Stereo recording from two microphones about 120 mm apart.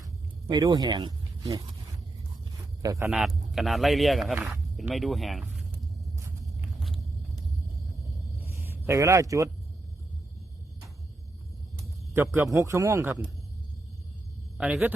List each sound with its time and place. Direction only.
0.5 s speech: 35° right (ahead or behind)
2.8 s a man's voice: 25° right (ahead or behind)
3.1 s speech: centre (ahead or behind)
8.4 s speech: 20° right (ahead or behind)
12.1 s a man's voice: 20° right (ahead or behind)
14.6 s speech: 10° right (ahead or behind)